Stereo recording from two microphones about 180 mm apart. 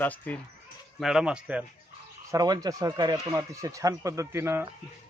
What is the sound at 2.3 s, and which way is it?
Speech, 20° right (ahead or behind).